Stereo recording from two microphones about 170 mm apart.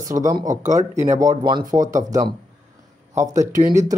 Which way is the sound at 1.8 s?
50° right (ahead or behind).